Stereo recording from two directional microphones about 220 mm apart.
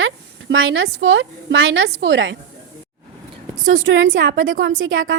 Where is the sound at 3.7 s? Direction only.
60° right (ahead or behind).